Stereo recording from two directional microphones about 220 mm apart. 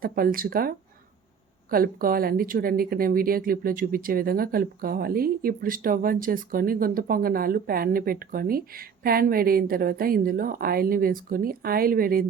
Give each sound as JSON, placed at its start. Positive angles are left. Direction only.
{"t": 0.0, "sound": "speech", "side_deg": -40}
{"t": 1.7, "sound": "speech", "side_deg": -40}